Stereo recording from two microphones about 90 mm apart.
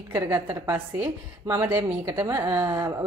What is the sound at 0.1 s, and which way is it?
A woman's voice, 25° right (ahead or behind).